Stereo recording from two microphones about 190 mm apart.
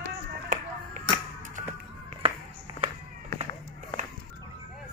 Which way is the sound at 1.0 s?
40° right (ahead or behind).